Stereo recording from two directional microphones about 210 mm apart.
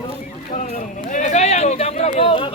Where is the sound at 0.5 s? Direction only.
35° left (ahead or behind).